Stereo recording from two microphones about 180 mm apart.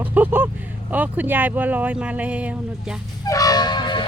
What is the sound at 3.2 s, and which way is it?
Music, 20° left (ahead or behind).